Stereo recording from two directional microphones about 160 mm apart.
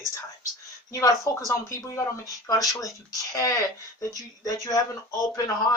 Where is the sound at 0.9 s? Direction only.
20° left (ahead or behind).